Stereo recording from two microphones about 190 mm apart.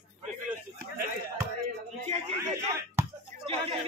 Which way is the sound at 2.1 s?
35° right (ahead or behind).